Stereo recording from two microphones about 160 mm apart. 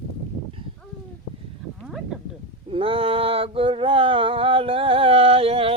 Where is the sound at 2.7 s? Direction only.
35° right (ahead or behind).